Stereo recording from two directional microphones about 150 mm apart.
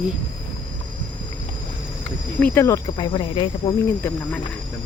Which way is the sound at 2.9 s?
35° left (ahead or behind).